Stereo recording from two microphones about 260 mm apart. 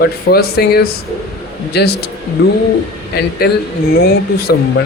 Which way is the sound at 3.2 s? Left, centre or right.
Left.